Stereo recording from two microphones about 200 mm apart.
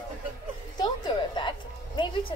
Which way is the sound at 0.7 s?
20° left (ahead or behind).